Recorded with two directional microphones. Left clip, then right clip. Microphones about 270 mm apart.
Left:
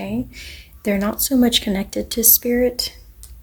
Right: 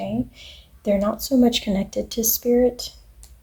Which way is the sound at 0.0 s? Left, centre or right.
Left.